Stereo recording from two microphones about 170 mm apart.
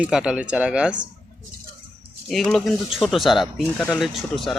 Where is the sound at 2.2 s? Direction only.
Centre (ahead or behind).